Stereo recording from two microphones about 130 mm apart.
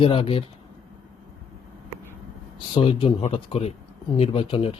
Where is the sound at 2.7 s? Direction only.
40° left (ahead or behind).